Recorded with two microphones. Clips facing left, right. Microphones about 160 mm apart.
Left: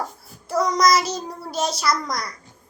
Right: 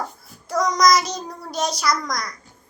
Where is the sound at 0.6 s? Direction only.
30° left (ahead or behind).